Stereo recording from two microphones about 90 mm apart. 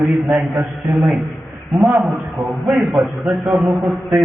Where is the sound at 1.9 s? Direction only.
30° right (ahead or behind).